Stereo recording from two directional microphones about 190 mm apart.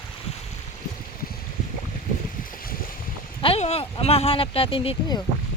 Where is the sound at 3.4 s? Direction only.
30° left (ahead or behind).